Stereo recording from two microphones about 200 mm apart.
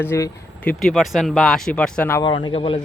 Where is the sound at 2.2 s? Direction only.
25° left (ahead or behind).